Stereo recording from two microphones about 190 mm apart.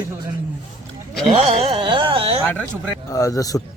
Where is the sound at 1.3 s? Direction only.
30° right (ahead or behind).